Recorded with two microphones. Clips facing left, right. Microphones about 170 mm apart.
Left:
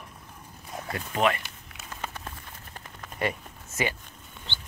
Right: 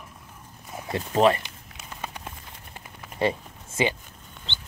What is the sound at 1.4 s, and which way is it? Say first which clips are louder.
Run: right 1 dB; 15° right (ahead or behind).